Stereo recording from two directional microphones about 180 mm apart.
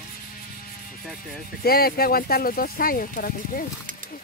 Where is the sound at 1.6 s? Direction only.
55° left (ahead or behind).